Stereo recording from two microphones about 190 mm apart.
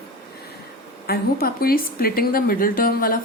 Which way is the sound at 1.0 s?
50° left (ahead or behind).